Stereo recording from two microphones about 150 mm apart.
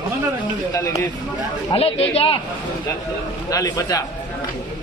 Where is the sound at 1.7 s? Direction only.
40° left (ahead or behind).